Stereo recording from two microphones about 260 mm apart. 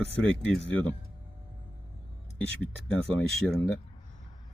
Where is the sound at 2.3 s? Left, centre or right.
Centre.